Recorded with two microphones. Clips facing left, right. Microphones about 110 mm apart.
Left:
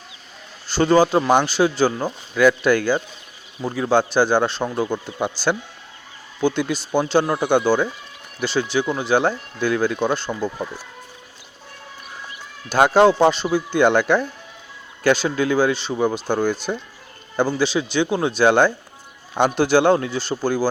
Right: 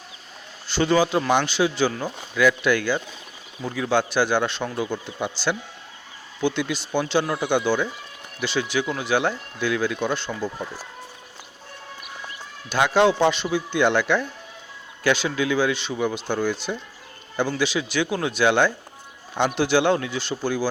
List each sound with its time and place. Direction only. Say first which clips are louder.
0.7 s speech: left 4 dB; 40° left (ahead or behind)
12.6 s speech: left 5 dB; 45° left (ahead or behind)
17.6 s speech: left 4 dB; 30° left (ahead or behind)